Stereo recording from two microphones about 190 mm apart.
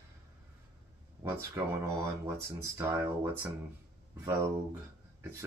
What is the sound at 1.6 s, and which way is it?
Speech, 15° right (ahead or behind).